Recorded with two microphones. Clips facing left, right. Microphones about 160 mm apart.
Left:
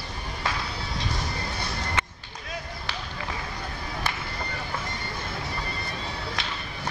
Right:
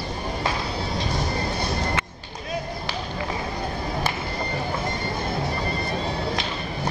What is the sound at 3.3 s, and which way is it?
Music, 30° right (ahead or behind).